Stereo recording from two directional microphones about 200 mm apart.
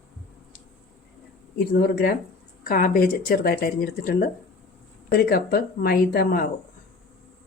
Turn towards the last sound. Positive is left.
turn(degrees=50)  # may be behind; listen again after turning